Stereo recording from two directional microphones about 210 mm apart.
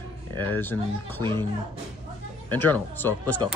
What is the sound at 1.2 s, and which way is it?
Speech, 25° right (ahead or behind).